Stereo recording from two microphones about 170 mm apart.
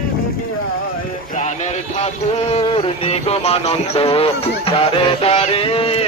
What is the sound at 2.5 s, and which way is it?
Speech, 35° left (ahead or behind).